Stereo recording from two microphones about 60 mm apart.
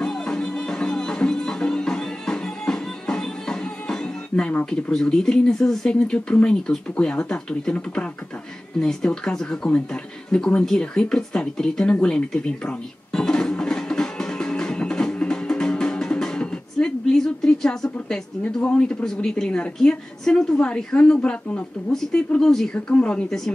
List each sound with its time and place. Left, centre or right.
0.0 s music: centre
4.9 s speech: centre
10.6 s a sound: centre
18.7 s speech: centre
22.4 s speech: centre
22.8 s speech: centre